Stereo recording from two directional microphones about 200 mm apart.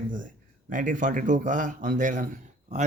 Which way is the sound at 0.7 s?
40° right (ahead or behind).